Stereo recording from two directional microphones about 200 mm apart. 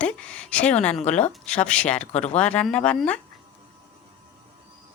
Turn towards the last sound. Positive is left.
turn(degrees=5)  # may be behind; listen again after turning